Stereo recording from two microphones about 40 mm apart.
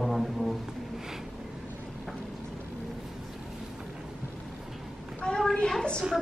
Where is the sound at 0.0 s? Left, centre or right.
Centre.